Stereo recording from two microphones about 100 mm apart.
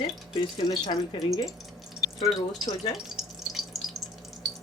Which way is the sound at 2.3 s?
40° left (ahead or behind).